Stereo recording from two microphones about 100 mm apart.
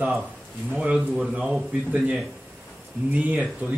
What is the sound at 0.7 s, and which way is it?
A man's voice, 10° right (ahead or behind).